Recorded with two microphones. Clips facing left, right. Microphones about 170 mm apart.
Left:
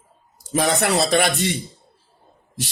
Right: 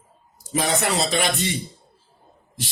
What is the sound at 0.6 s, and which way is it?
Speech, 60° left (ahead or behind).